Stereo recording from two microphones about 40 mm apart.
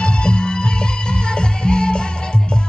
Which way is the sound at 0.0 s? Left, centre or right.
Left.